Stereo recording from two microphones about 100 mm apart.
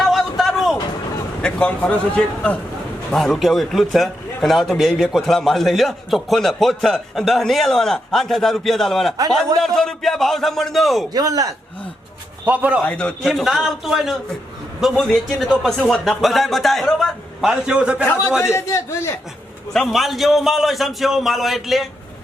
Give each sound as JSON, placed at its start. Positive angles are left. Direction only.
{"t": 0.0, "sound": "a sound", "side_deg": 0}
{"t": 1.4, "sound": "a man's voice", "side_deg": 10}
{"t": 11.1, "sound": "a man's voice", "side_deg": -35}
{"t": 12.5, "sound": "a man's voice", "side_deg": -15}
{"t": 12.8, "sound": "a man's voice", "side_deg": 10}
{"t": 13.2, "sound": "a man's voice", "side_deg": 0}
{"t": 18.5, "sound": "a man's voice", "side_deg": 25}
{"t": 19.7, "sound": "a man's voice", "side_deg": 0}